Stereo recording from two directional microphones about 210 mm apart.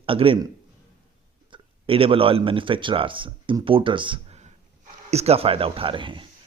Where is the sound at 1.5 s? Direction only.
25° right (ahead or behind).